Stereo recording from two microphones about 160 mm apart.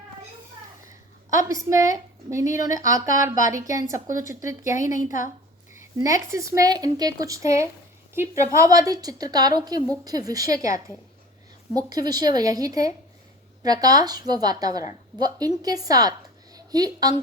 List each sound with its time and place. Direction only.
1.3 s speech: 20° right (ahead or behind)
5.0 s a woman's voice: 55° left (ahead or behind)
5.7 s a woman's voice: 20° right (ahead or behind)